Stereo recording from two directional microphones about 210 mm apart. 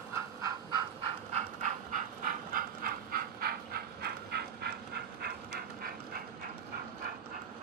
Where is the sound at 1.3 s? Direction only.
35° right (ahead or behind).